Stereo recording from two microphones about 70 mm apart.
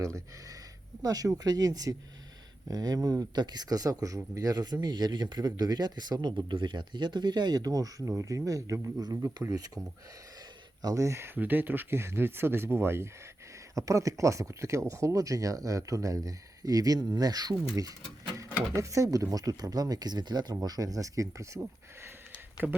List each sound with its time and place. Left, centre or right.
1.0 s speech: right
9.5 s speech: right
10.8 s speech: right
11.3 s speech: right
13.7 s speech: right
18.3 s speech: right
22.6 s speech: centre